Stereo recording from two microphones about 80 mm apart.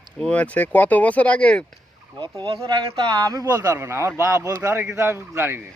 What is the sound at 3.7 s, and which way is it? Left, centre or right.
Speech, right.